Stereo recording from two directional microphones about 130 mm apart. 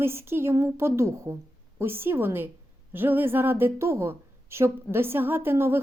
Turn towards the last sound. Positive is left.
turn(degrees=-20)  # may be behind; listen again after turning